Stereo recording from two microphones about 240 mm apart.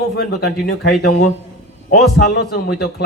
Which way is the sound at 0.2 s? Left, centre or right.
Left.